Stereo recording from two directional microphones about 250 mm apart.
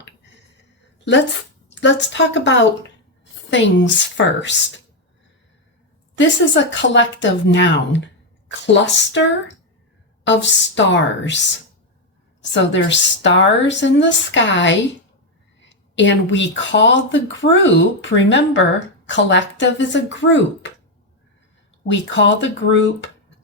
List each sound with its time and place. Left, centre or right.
1.8 s speech: left
6.1 s speech: left
10.2 s speech: left
21.8 s speech: left